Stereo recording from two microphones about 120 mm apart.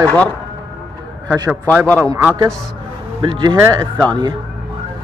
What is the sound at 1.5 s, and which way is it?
Speech, 15° right (ahead or behind).